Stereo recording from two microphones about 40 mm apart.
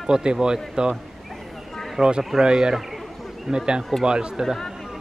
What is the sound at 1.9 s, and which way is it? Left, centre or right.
A man's voice, right.